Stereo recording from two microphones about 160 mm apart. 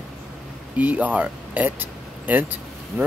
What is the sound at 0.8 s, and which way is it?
Speech, 10° right (ahead or behind).